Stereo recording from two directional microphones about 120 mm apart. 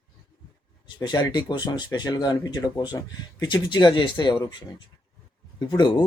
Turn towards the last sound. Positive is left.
turn(degrees=40)  # may be behind; listen again after turning